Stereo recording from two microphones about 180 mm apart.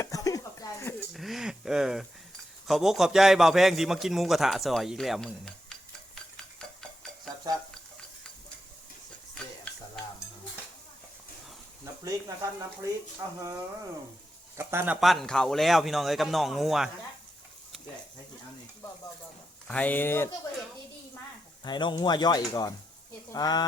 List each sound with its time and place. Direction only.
0.0 s a sound: 20° left (ahead or behind)
1.1 s a man's voice: centre (ahead or behind)
6.1 s stir: 5° left (ahead or behind)
7.5 s stir: 20° right (ahead or behind)
12.0 s speech: 15° right (ahead or behind)
14.5 s speech: 15° right (ahead or behind)
15.0 s a man's voice: centre (ahead or behind)
19.6 s speech: 10° left (ahead or behind)
21.6 s speech: 25° left (ahead or behind)